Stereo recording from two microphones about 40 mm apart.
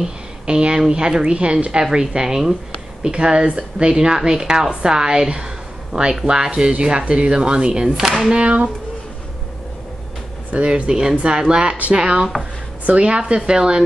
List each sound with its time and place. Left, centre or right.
0.5 s a woman's voice: right
8.0 s speech: centre
8.3 s a woman's voice: right
10.5 s speech: right
10.9 s a woman's voice: centre